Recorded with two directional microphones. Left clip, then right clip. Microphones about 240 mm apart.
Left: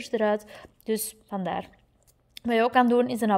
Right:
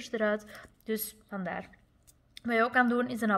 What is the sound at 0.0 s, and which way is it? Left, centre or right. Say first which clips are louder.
A woman's voice: left 5 dB; left.